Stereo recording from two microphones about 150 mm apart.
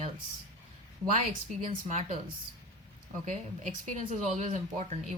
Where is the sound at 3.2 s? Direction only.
55° right (ahead or behind).